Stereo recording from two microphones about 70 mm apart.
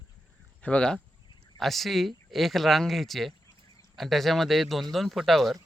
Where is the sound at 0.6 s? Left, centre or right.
Centre.